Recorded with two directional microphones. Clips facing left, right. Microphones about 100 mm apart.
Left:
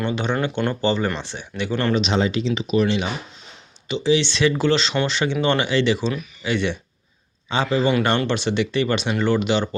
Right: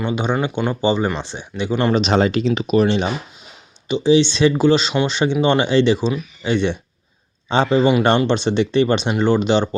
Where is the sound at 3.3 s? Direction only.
15° right (ahead or behind).